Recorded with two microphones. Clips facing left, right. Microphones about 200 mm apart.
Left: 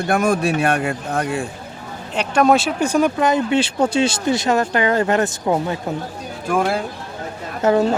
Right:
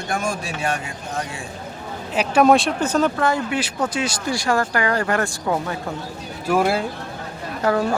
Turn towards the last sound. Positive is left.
turn(degrees=25)  # may be behind; listen again after turning